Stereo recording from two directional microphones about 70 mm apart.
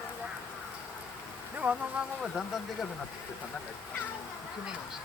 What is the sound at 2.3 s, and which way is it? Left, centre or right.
Speech, centre.